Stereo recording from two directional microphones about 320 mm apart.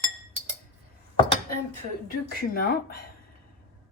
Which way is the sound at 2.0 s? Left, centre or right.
Left.